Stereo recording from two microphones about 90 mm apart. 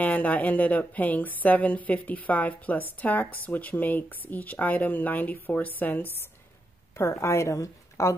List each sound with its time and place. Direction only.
0.0 s speech: 15° left (ahead or behind)
7.0 s a woman's voice: 35° left (ahead or behind)